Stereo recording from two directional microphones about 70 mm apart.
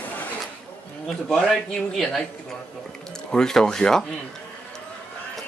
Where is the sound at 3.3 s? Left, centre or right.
Centre.